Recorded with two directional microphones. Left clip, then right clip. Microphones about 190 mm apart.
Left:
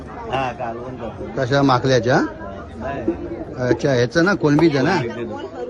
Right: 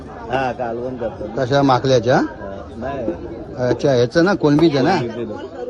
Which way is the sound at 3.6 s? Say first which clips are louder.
Right 2 dB; 20° right (ahead or behind).